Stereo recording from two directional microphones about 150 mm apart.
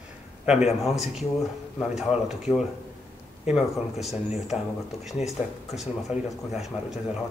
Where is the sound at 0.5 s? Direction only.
5° right (ahead or behind).